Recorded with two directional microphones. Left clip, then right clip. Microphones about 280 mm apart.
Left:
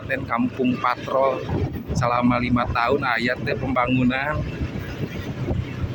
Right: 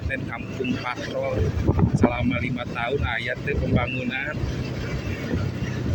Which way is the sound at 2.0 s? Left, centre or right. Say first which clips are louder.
Left 7 dB; left.